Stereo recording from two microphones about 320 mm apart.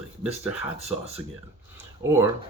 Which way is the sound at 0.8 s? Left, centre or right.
Centre.